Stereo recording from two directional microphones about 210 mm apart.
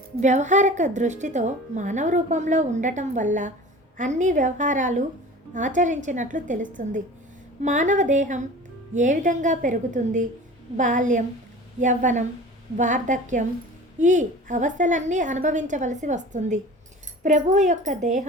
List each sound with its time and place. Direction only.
0.2 s a woman's voice: 35° right (ahead or behind)